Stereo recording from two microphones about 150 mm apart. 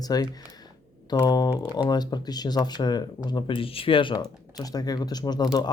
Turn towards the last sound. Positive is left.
turn(degrees=25)  # may be behind; listen again after turning